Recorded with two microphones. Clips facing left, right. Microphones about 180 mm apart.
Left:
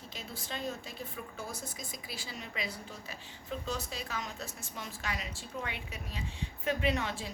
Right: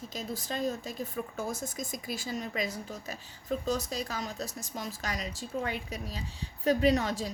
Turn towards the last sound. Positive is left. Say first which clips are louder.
# right 6 dB
turn(degrees=-40)  # may be behind; listen again after turning